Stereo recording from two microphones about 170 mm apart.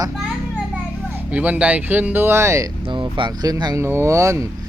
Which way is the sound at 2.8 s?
30° right (ahead or behind).